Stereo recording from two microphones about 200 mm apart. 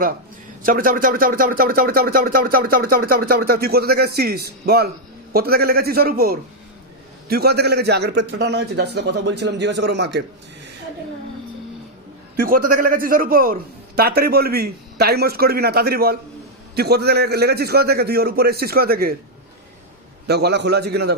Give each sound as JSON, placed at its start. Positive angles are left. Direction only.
{"t": 0.6, "sound": "a man's voice", "side_deg": -45}
{"t": 12.4, "sound": "speech", "side_deg": -45}
{"t": 20.2, "sound": "a man's voice", "side_deg": -55}